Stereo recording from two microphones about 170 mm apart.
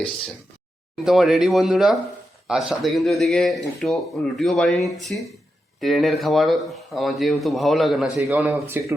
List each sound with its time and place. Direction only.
1.0 s speech: centre (ahead or behind)